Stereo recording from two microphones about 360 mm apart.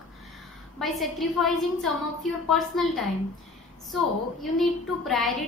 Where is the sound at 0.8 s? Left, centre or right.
Centre.